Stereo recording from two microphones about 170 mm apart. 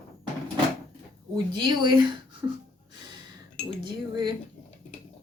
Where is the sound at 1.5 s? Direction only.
25° right (ahead or behind).